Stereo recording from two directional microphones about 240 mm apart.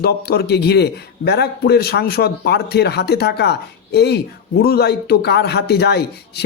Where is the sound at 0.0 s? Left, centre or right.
Left.